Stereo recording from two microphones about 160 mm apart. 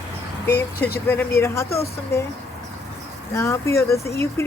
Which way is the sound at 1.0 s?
15° left (ahead or behind).